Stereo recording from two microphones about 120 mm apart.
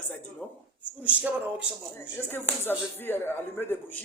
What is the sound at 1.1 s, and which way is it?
Speech, 10° right (ahead or behind).